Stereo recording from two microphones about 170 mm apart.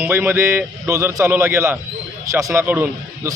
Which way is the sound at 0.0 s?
10° right (ahead or behind).